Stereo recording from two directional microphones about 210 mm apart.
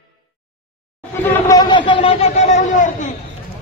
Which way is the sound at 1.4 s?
20° left (ahead or behind).